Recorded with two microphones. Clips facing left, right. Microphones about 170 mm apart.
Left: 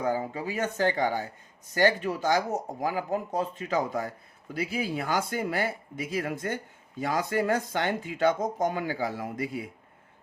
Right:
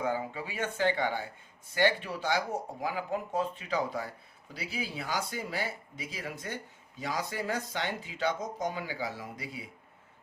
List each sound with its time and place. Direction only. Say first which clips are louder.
0.0 s speech: left 4 dB; 40° left (ahead or behind)